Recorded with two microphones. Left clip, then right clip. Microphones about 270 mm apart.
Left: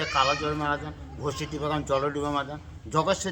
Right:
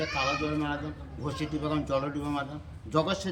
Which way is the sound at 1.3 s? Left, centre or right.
Centre.